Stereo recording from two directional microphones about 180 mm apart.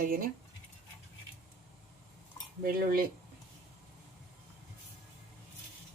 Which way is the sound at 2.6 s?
55° right (ahead or behind).